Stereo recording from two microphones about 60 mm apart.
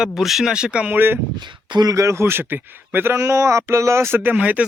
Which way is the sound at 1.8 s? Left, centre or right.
Right.